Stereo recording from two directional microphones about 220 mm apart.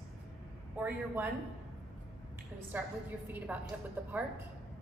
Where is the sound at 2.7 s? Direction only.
10° right (ahead or behind).